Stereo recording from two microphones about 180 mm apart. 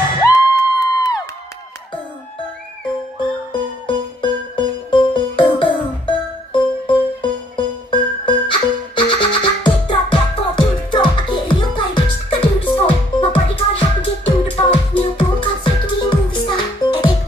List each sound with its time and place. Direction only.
0.3 s crowd: 20° left (ahead or behind)
3.5 s music: 25° left (ahead or behind)